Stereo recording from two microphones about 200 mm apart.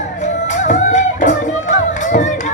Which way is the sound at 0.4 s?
35° left (ahead or behind).